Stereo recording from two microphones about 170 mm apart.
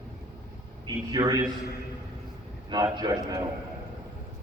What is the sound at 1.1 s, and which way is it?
Speech, 20° right (ahead or behind).